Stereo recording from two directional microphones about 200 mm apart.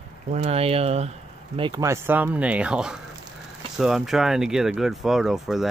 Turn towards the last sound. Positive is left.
turn(degrees=0)  # may be behind; listen again after turning